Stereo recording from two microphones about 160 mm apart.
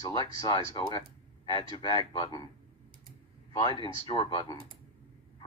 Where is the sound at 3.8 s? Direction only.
30° left (ahead or behind).